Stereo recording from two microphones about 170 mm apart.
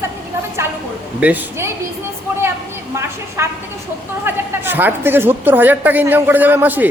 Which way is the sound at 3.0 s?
15° right (ahead or behind).